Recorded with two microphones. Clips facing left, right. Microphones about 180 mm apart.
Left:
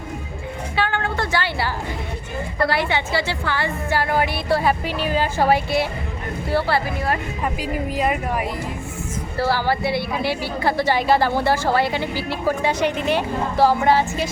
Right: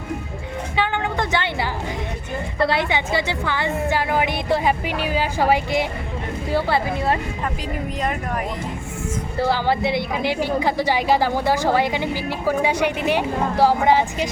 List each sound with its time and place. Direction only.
0.8 s a sound: 20° right (ahead or behind)
2.6 s a woman's voice: 20° right (ahead or behind)
7.9 s speech: 10° left (ahead or behind)
9.4 s a woman's voice: 20° right (ahead or behind)